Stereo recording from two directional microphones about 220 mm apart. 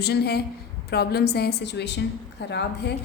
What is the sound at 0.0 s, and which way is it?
A woman's voice, 45° left (ahead or behind).